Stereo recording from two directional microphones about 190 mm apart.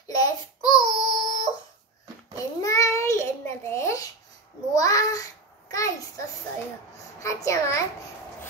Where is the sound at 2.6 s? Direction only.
15° left (ahead or behind).